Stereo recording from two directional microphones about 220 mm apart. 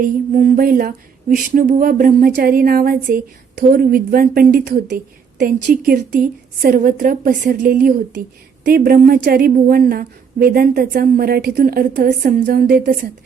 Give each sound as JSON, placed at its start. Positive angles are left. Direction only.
{"t": 0.0, "sound": "a woman's voice", "side_deg": -35}